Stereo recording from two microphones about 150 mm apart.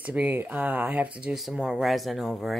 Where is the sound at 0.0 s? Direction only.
10° right (ahead or behind).